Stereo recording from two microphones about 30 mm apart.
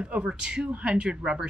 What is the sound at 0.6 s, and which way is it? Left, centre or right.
Speech, right.